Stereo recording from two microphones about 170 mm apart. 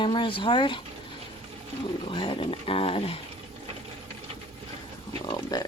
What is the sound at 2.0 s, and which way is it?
Dog, 30° left (ahead or behind).